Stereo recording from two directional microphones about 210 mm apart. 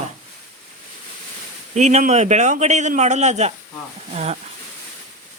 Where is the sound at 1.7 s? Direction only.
30° right (ahead or behind).